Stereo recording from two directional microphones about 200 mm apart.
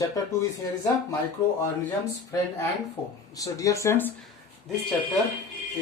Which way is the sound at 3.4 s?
15° left (ahead or behind).